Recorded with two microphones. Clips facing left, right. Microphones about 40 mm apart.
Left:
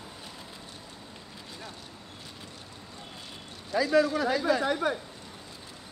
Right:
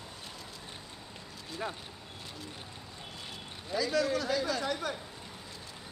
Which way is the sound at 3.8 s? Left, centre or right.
Left.